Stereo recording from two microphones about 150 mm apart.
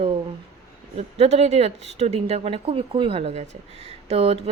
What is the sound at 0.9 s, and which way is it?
Speech, 45° right (ahead or behind).